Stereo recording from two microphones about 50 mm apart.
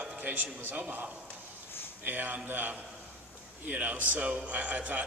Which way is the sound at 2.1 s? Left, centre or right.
Right.